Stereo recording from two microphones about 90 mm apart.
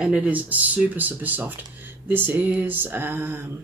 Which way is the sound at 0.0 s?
15° right (ahead or behind).